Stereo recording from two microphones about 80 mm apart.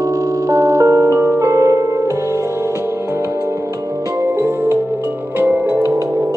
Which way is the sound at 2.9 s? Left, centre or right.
Right.